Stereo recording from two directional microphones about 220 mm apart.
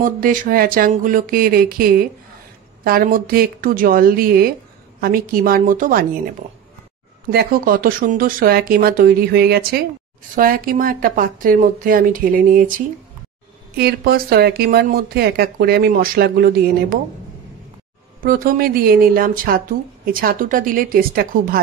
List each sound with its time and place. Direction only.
0.0 s speech: 40° right (ahead or behind)
7.2 s speech: 40° right (ahead or behind)
18.2 s speech: 40° right (ahead or behind)